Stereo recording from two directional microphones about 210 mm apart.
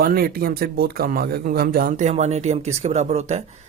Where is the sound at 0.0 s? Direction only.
45° right (ahead or behind).